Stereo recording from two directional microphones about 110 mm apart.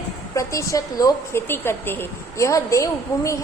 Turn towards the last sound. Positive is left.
turn(degrees=30)  # may be behind; listen again after turning